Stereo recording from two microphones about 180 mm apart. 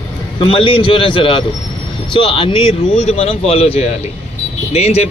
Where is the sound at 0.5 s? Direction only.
30° left (ahead or behind).